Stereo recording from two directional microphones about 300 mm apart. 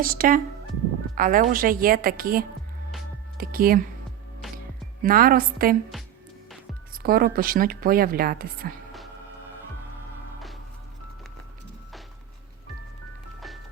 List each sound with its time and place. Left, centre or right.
0.0 s speech: right
5.0 s speech: right
6.9 s speech: right